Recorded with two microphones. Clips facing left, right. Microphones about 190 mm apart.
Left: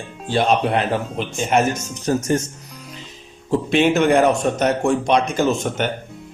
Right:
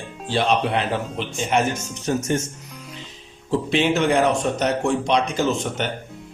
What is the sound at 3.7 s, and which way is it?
Speech, 50° left (ahead or behind).